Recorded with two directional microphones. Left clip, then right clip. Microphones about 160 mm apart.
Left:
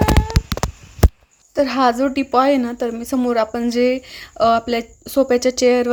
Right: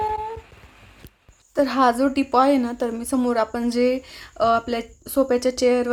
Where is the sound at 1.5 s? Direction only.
15° left (ahead or behind).